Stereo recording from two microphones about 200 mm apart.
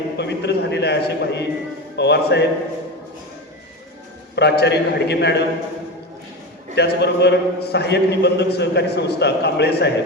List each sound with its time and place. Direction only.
0.2 s a man's voice: 60° left (ahead or behind)
4.4 s a man's voice: 55° left (ahead or behind)
6.7 s a man's voice: 55° left (ahead or behind)